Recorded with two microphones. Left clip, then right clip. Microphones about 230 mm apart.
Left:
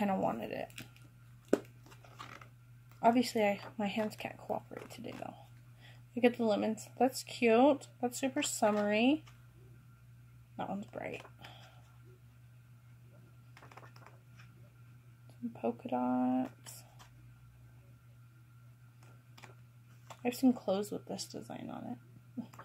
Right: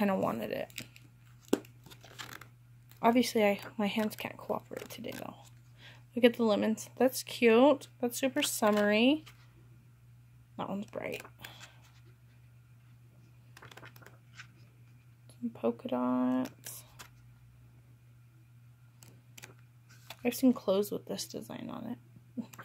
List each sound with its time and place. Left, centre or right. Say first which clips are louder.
0.0 s speech: right 2 dB; right
3.0 s speech: right 2 dB; right
10.5 s speech: right 2 dB; right
13.6 s typing: right 3 dB; centre
15.5 s speech: right 3 dB; right
20.2 s speech: right 3 dB; right